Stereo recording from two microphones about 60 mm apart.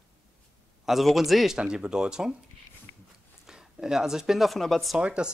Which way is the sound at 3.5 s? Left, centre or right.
Centre.